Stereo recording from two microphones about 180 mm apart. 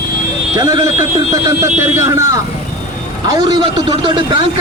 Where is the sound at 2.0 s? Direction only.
20° right (ahead or behind).